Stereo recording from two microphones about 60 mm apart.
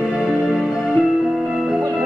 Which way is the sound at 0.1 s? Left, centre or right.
Centre.